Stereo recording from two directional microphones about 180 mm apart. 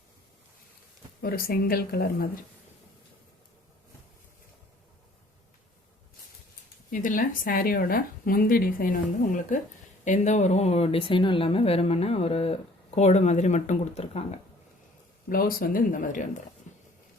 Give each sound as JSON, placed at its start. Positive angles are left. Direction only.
{"t": 1.2, "sound": "speech", "side_deg": 55}
{"t": 6.9, "sound": "speech", "side_deg": 50}
{"t": 15.3, "sound": "speech", "side_deg": 55}